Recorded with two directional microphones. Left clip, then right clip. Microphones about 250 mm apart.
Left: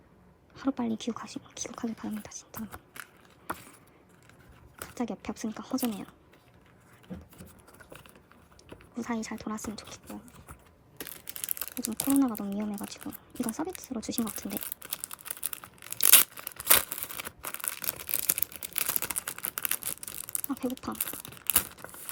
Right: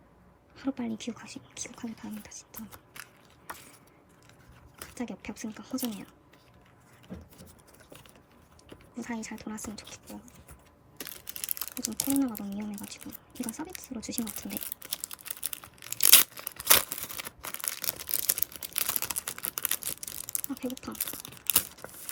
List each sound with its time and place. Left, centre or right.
0.5 s speech: centre
4.9 s speech: centre
9.0 s speech: centre
11.0 s a sound: centre
20.5 s crumpling: centre
21.8 s a sound: centre